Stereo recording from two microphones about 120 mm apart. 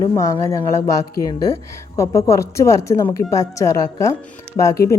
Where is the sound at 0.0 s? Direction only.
30° left (ahead or behind).